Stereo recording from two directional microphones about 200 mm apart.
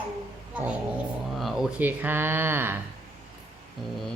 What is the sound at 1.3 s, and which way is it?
A woman's voice, centre (ahead or behind).